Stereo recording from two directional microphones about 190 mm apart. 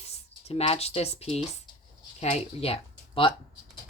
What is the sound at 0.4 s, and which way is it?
Speech, 30° left (ahead or behind).